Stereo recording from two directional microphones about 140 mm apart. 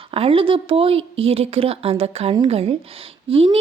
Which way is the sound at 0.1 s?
40° right (ahead or behind).